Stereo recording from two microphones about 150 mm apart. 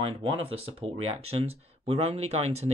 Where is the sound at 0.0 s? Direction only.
40° right (ahead or behind).